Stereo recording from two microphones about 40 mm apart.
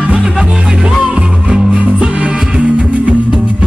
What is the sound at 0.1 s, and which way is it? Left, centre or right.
Music, right.